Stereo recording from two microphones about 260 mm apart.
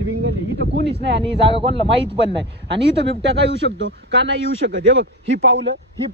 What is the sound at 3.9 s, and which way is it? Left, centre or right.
Speech, right.